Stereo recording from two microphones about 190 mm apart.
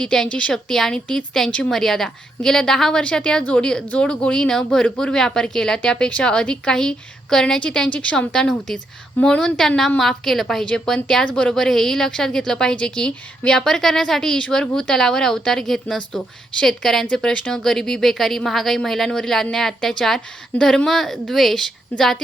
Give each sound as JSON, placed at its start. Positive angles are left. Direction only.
{"t": 0.0, "sound": "a woman's voice", "side_deg": 5}